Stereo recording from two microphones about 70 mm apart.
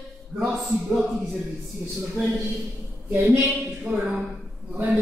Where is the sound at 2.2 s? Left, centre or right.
Right.